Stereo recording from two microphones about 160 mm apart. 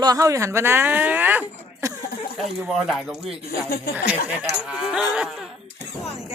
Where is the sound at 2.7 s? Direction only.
Centre (ahead or behind).